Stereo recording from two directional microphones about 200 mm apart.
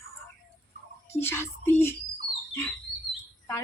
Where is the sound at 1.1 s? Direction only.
10° left (ahead or behind).